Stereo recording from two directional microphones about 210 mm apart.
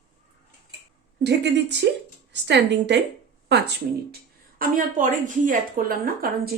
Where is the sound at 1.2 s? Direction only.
55° right (ahead or behind).